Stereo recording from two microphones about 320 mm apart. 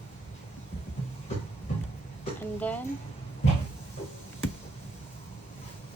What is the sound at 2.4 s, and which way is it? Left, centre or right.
Speech, centre.